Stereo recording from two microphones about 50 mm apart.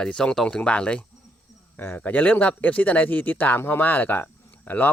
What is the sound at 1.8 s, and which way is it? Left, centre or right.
Speech, left.